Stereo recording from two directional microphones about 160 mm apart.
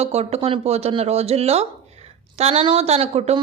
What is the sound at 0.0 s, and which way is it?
A woman's voice, 40° right (ahead or behind).